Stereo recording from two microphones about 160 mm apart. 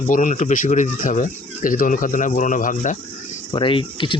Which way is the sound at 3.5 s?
30° left (ahead or behind).